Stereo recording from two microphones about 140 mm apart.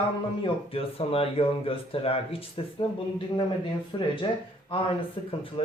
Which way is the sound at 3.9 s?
30° left (ahead or behind).